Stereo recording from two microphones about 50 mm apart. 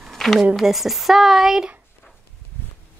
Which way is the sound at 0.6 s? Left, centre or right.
Centre.